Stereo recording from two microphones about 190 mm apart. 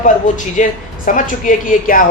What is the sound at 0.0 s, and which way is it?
A man's voice, 40° left (ahead or behind).